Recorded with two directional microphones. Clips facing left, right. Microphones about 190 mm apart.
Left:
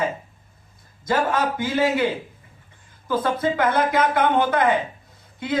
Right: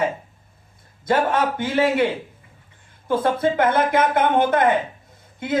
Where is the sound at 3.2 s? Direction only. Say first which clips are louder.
Right 2 dB; 55° right (ahead or behind).